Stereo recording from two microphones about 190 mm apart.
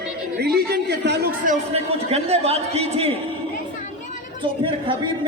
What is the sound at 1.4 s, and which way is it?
A man's voice, 35° right (ahead or behind).